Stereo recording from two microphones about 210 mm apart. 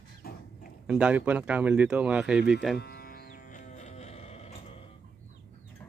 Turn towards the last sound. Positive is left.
turn(degrees=30)  # may be behind; listen again after turning